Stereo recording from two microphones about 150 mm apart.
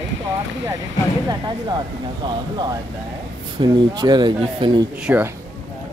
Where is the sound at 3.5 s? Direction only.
30° right (ahead or behind).